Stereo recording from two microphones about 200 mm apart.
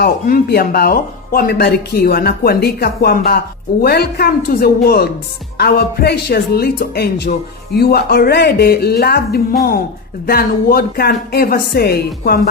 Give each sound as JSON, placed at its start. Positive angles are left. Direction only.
{"t": 0.0, "sound": "speech", "side_deg": 50}